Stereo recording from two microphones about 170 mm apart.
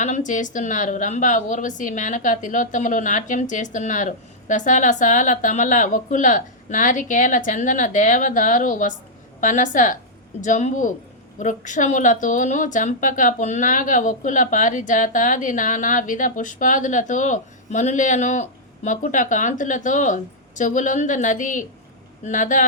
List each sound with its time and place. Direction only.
0.0 s a woman's voice: 45° left (ahead or behind)